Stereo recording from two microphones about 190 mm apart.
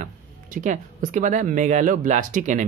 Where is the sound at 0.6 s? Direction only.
45° right (ahead or behind).